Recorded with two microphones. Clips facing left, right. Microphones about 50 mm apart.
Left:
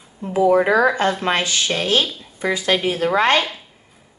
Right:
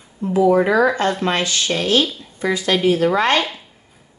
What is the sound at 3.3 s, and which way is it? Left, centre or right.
Speech, centre.